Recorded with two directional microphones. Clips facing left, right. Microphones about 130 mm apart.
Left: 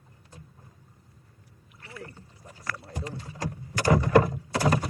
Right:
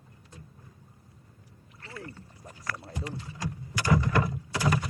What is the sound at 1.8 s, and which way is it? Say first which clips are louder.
Rowboat: even; 15° left (ahead or behind).